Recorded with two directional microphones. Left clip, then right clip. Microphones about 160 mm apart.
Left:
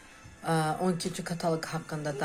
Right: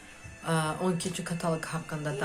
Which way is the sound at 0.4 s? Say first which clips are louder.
Left 1 dB; 25° left (ahead or behind).